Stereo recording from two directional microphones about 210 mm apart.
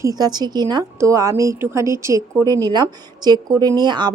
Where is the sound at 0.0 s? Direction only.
20° right (ahead or behind).